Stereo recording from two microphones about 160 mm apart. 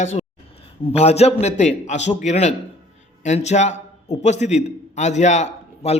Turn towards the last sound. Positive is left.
turn(degrees=45)  # may be behind; listen again after turning